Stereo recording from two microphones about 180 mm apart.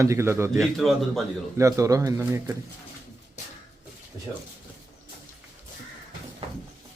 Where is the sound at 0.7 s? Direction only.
Centre (ahead or behind).